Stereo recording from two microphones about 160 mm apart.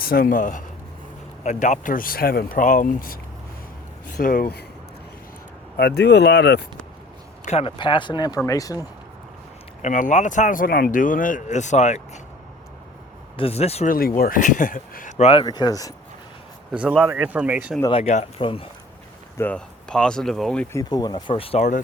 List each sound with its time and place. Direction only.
0.0 s speech: 65° left (ahead or behind)
5.7 s speech: 85° left
7.4 s speech: 35° left (ahead or behind); by 8.8 s 20° left (ahead or behind)
9.8 s speech: 50° left (ahead or behind)
13.3 s speech: 40° left (ahead or behind)
13.9 s speech: 65° left (ahead or behind)
15.2 s speech: 35° left (ahead or behind)
15.4 s speech: 25° left (ahead or behind)
16.7 s speech: 10° right (ahead or behind)
17.9 s speech: 45° left (ahead or behind)
19.4 s speech: 5° left (ahead or behind)
20.7 s speech: 25° left (ahead or behind)